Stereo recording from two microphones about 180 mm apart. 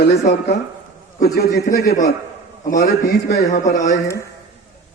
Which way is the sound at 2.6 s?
55° left (ahead or behind).